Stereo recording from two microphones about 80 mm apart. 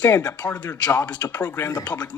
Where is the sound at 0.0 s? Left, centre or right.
Centre.